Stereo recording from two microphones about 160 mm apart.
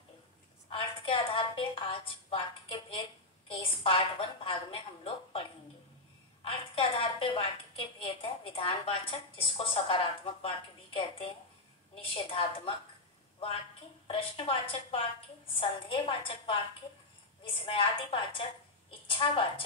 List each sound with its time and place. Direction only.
0.7 s a woman's voice: 35° left (ahead or behind)
14.0 s a woman's voice: 35° left (ahead or behind)